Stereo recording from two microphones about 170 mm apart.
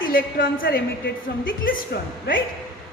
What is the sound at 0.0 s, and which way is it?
Speech, 55° left (ahead or behind).